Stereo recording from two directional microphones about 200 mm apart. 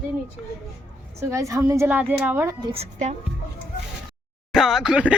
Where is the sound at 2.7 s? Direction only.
35° right (ahead or behind).